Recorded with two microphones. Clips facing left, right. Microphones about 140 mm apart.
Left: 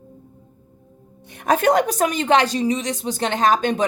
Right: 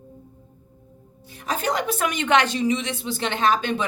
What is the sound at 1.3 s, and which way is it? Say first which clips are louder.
A woman's voice: left 8 dB; 55° left (ahead or behind).